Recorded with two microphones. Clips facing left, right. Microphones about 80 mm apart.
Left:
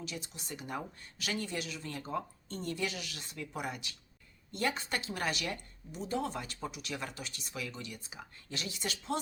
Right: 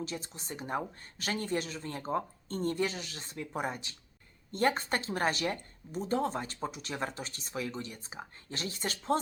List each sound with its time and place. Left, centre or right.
0.0 s speech: right